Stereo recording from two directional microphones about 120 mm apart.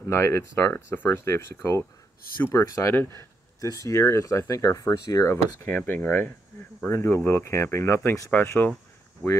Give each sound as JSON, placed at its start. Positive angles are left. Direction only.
{"t": 0.1, "sound": "speech", "side_deg": 20}